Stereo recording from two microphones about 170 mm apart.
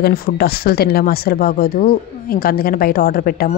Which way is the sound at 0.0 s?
65° left (ahead or behind).